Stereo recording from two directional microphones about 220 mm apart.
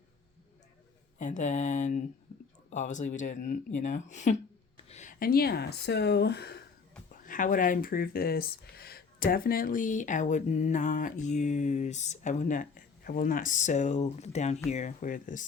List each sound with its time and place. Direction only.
1.2 s speech: 35° left (ahead or behind)
7.1 s speech: 35° left (ahead or behind)